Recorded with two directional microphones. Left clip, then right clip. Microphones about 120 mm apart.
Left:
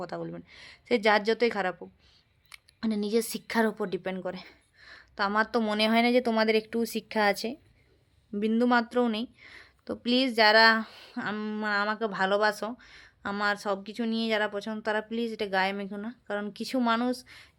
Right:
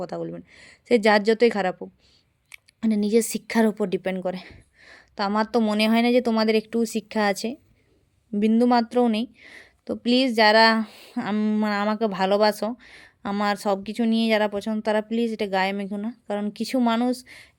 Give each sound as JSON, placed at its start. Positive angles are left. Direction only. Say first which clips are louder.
{"t": 0.0, "sound": "speech", "louder": "right 5 dB", "side_deg": -25}